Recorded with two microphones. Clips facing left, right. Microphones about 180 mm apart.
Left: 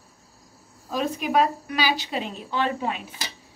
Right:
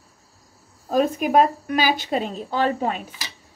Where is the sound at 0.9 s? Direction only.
45° right (ahead or behind).